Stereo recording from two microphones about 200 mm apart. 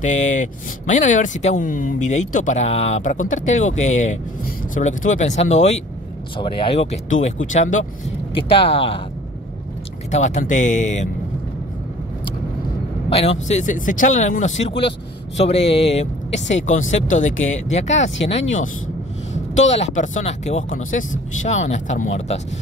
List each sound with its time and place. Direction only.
0.8 s speech: 40° left (ahead or behind)
8.4 s speech: 25° left (ahead or behind)
10.1 s speech: 35° left (ahead or behind)
13.1 s speech: 30° left (ahead or behind)
17.3 s speech: 80° left
17.7 s speech: 35° left (ahead or behind)
19.3 s vehicle: 35° left (ahead or behind)
20.0 s speech: 35° left (ahead or behind)